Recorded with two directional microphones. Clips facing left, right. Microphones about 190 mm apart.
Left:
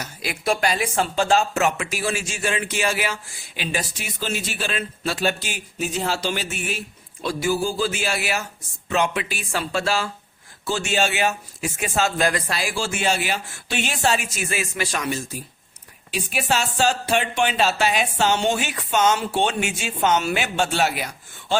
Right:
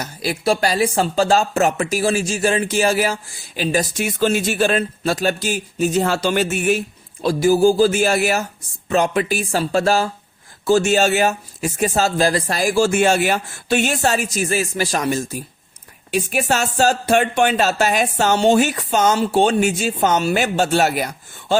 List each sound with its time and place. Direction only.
0.0 s speech: 35° right (ahead or behind)